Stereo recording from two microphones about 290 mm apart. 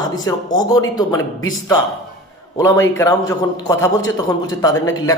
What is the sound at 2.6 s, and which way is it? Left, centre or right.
A man's voice, centre.